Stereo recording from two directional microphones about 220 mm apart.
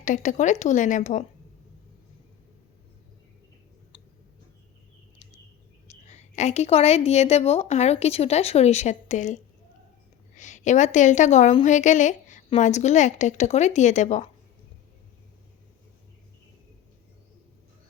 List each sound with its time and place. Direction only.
0.0 s a woman's voice: 35° left (ahead or behind)
5.9 s a woman's voice: 30° left (ahead or behind)